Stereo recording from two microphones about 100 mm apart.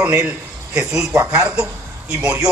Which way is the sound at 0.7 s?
10° right (ahead or behind).